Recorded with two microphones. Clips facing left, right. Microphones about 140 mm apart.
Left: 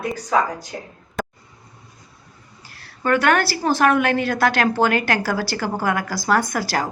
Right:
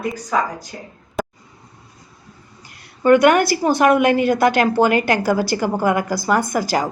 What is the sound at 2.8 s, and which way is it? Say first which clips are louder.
A woman's voice: right 6 dB; 15° right (ahead or behind).